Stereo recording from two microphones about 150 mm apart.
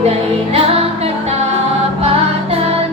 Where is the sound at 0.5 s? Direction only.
40° right (ahead or behind).